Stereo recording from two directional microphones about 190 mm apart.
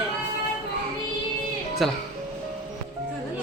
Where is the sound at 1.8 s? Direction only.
Centre (ahead or behind).